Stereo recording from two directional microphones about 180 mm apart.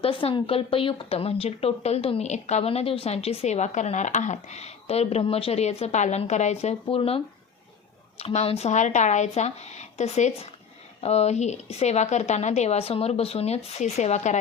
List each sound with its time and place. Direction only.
0.0 s a woman's voice: 30° left (ahead or behind)
8.2 s a woman's voice: 35° left (ahead or behind)